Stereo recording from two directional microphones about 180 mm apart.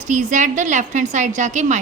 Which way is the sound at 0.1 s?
45° right (ahead or behind).